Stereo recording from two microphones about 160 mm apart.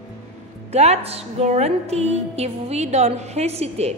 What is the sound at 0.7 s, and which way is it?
A woman's voice, 45° right (ahead or behind).